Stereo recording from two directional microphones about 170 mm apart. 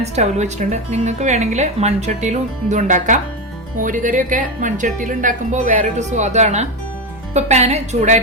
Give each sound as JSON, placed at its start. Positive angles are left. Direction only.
{"t": 0.0, "sound": "a woman's voice", "side_deg": -40}